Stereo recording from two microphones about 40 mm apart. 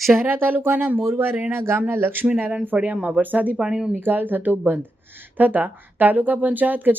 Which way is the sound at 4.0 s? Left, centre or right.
Right.